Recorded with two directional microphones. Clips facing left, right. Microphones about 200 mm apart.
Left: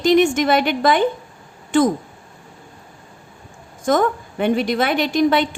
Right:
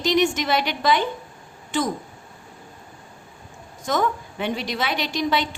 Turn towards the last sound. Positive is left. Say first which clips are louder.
# left 7 dB
turn(degrees=55)  # may be behind; listen again after turning